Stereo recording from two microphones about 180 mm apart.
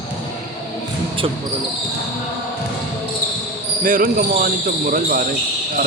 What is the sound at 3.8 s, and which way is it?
Speech, 50° right (ahead or behind).